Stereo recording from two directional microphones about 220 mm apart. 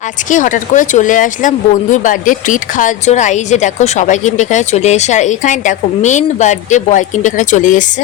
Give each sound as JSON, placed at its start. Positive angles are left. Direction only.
{"t": 0.3, "sound": "speech", "side_deg": 35}